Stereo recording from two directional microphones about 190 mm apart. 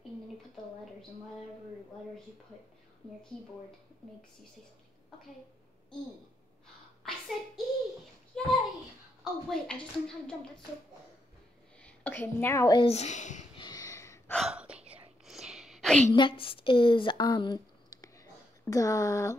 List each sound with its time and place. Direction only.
7.0 s a sound: centre (ahead or behind)
9.2 s a woman's voice: 5° left (ahead or behind)
11.8 s speech: 10° left (ahead or behind); by 13.5 s 40° left (ahead or behind)
13.6 s a sound: 20° left (ahead or behind)
14.3 s whispering: 5° right (ahead or behind)
16.1 s speech: 25° left (ahead or behind)